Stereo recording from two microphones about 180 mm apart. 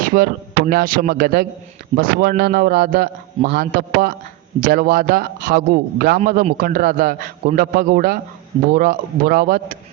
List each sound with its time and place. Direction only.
0.0 s a man's voice: 55° right (ahead or behind)